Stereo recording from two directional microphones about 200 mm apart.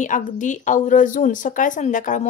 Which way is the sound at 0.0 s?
40° left (ahead or behind).